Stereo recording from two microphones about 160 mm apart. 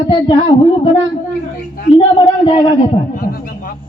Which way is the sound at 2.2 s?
35° left (ahead or behind).